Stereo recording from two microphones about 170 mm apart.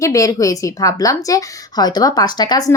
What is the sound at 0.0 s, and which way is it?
A woman's voice, 20° left (ahead or behind).